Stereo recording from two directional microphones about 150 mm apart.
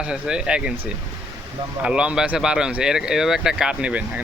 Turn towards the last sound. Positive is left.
turn(degrees=-10)  # may be behind; listen again after turning